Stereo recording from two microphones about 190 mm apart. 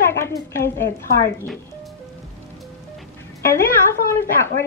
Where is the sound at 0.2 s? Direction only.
15° left (ahead or behind).